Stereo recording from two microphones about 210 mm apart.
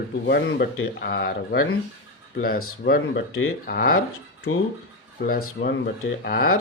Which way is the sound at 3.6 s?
45° left (ahead or behind).